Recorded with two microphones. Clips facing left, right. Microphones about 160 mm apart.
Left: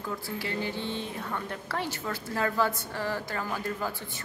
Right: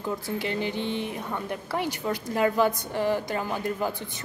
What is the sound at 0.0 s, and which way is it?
A woman's voice, 20° right (ahead or behind).